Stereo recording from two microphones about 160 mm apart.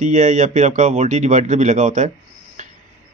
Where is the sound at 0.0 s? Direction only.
50° right (ahead or behind).